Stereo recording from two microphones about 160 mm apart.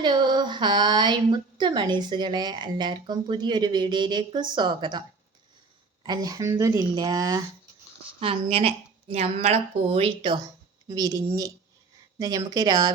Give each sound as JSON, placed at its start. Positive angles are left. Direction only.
{"t": 0.0, "sound": "speech", "side_deg": -30}
{"t": 8.2, "sound": "speech", "side_deg": -35}